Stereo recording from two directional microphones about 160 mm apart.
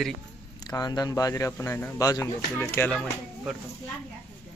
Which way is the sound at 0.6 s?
25° left (ahead or behind).